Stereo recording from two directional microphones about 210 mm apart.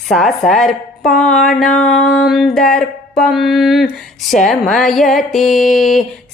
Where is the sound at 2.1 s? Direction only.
Centre (ahead or behind).